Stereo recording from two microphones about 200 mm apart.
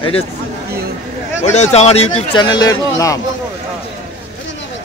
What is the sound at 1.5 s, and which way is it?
Speech, 35° left (ahead or behind).